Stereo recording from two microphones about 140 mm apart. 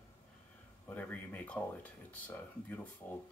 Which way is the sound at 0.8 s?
10° left (ahead or behind).